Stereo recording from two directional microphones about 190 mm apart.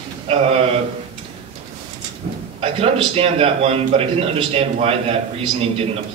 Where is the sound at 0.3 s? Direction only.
30° right (ahead or behind).